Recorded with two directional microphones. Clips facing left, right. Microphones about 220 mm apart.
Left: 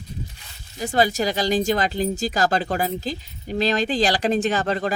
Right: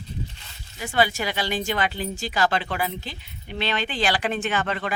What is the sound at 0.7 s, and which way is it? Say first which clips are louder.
Speech: left 3 dB; 40° left (ahead or behind).